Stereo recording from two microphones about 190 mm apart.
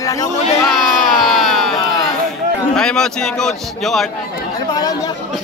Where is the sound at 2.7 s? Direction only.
5° left (ahead or behind).